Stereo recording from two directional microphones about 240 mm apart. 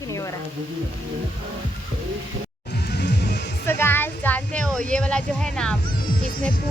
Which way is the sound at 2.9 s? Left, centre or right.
Left.